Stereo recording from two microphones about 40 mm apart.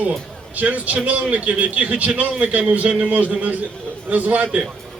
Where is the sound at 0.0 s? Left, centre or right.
Right.